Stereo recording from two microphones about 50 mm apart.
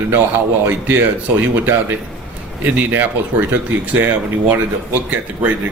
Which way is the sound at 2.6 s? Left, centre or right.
Right.